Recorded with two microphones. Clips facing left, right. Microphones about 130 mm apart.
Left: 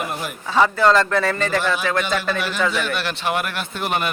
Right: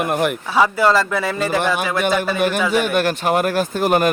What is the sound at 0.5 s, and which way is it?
A man's voice, 10° right (ahead or behind).